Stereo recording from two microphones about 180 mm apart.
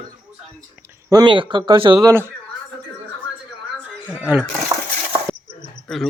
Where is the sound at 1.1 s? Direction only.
25° right (ahead or behind).